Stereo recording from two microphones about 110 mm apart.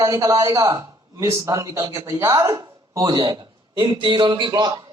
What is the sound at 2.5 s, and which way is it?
Speech, 35° right (ahead or behind).